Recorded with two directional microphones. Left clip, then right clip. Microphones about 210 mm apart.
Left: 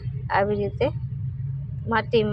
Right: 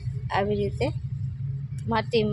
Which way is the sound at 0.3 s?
20° right (ahead or behind).